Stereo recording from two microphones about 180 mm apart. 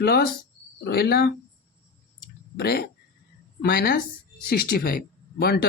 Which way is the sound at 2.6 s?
60° left (ahead or behind).